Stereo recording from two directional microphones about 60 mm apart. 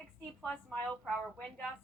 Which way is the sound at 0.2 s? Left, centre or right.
Left.